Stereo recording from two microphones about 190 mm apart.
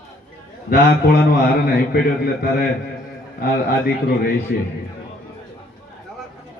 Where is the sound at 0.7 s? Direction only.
50° left (ahead or behind).